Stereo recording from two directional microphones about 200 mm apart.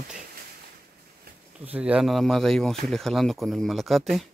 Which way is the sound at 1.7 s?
5° right (ahead or behind).